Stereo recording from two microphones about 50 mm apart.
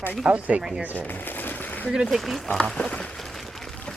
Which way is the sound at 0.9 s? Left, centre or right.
Left.